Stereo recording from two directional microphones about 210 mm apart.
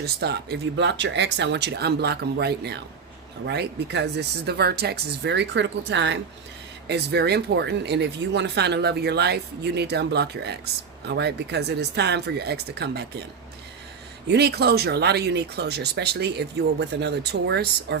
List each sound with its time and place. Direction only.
0.0 s speech: 50° right (ahead or behind)
14.3 s speech: 50° right (ahead or behind)